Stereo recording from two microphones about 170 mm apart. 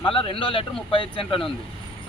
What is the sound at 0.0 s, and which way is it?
A man's voice, 35° left (ahead or behind).